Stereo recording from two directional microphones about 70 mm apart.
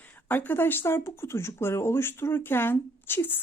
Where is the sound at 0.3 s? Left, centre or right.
Left.